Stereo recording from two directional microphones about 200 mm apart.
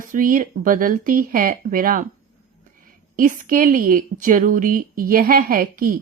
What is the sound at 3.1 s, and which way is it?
Speech, 40° right (ahead or behind).